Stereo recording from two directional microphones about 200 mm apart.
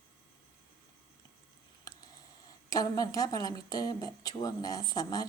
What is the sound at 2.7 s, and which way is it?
Speech, 20° left (ahead or behind).